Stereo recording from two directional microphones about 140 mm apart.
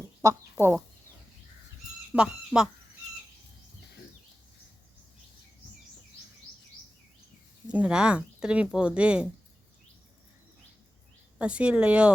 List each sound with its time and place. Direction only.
0.2 s speech: 20° right (ahead or behind)
2.1 s speech: 5° right (ahead or behind)
7.7 s speech: 10° right (ahead or behind)
11.3 s speech: 10° right (ahead or behind)